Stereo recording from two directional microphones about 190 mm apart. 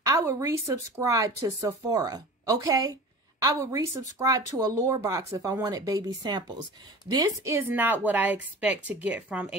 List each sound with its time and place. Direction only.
0.0 s a woman's voice: 15° right (ahead or behind)